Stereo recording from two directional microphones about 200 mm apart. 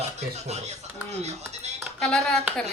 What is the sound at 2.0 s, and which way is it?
Speech, 5° left (ahead or behind).